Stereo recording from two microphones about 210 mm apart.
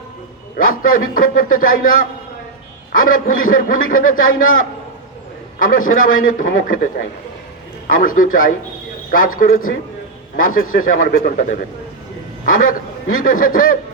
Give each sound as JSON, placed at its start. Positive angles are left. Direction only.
{"t": 0.5, "sound": "a man's voice", "side_deg": 40}
{"t": 12.6, "sound": "a man's voice", "side_deg": 40}